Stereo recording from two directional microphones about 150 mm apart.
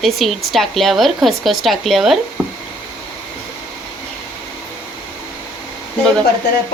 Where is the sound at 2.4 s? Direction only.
10° right (ahead or behind).